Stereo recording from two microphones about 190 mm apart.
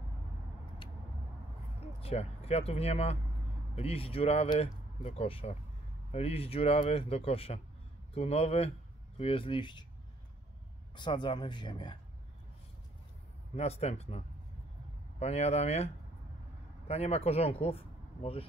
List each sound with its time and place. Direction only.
2.0 s speech: 35° left (ahead or behind)
11.0 s speech: 25° left (ahead or behind)
13.6 s speech: 35° left (ahead or behind)